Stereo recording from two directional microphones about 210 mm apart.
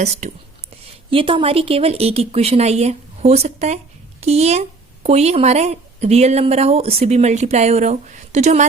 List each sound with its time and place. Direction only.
0.0 s a woman's voice: 35° right (ahead or behind)